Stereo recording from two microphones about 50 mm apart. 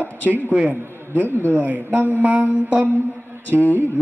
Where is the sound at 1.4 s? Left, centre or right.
Right.